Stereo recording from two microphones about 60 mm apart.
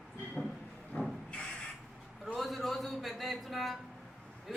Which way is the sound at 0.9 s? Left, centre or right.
Left.